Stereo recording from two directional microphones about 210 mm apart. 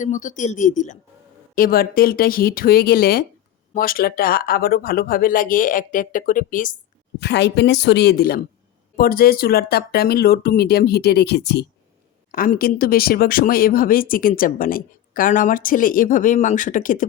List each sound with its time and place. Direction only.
0.0 s speech: 35° left (ahead or behind)
7.2 s a woman's voice: 55° left (ahead or behind)